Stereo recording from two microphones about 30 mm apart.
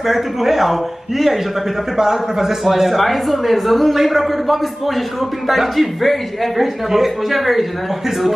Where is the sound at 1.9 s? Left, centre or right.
Centre.